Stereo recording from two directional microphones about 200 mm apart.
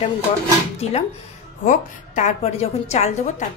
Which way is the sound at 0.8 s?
30° left (ahead or behind).